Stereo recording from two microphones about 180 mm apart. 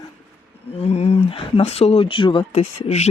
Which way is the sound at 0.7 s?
35° left (ahead or behind).